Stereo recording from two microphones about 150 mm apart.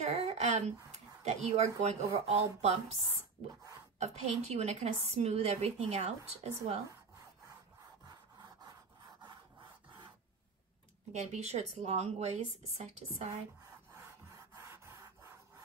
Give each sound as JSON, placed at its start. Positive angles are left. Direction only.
{"t": 0.0, "sound": "a woman's voice", "side_deg": -45}
{"t": 4.0, "sound": "a woman's voice", "side_deg": -50}
{"t": 8.1, "sound": "sawing", "side_deg": -25}
{"t": 11.1, "sound": "a woman's voice", "side_deg": -50}
{"t": 13.9, "sound": "rub", "side_deg": -20}